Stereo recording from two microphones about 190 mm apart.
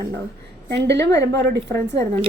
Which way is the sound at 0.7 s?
65° right (ahead or behind).